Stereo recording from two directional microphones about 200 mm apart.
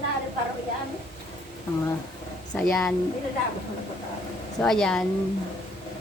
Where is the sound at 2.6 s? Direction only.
5° left (ahead or behind).